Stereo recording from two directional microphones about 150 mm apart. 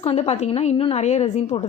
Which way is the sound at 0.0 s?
45° left (ahead or behind).